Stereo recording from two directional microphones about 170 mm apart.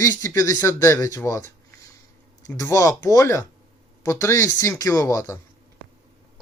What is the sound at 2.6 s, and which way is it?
A man's voice, 20° left (ahead or behind).